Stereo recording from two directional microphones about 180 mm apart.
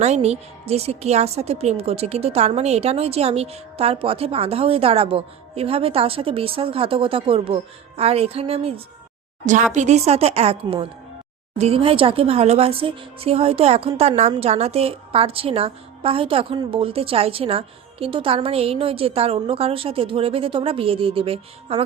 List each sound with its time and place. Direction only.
0.0 s a woman's voice: 35° right (ahead or behind)